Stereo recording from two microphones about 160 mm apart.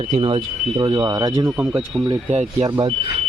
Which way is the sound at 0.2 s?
30° right (ahead or behind).